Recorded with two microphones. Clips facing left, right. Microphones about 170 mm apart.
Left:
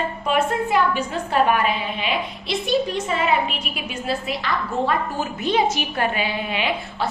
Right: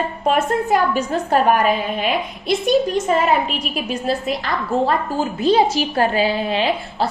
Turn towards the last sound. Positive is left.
turn(degrees=-35)  # may be behind; listen again after turning